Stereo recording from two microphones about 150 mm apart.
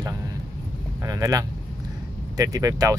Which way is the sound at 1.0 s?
25° right (ahead or behind).